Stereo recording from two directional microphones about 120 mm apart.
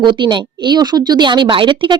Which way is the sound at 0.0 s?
40° right (ahead or behind).